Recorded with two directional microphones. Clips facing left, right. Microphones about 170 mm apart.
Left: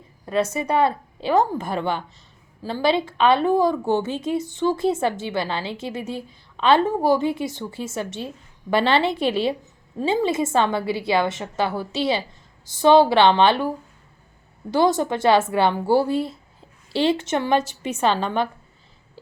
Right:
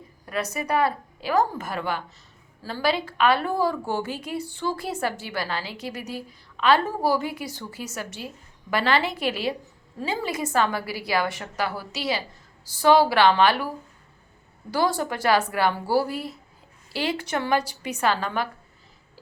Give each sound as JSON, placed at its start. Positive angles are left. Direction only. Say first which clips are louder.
{"t": 0.3, "sound": "a woman's voice", "louder": "left 5 dB", "side_deg": 25}
{"t": 14.7, "sound": "a woman's voice", "louder": "left 5 dB", "side_deg": 20}